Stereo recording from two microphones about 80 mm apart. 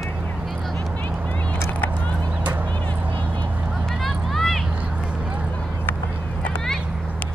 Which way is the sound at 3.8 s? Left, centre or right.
Centre.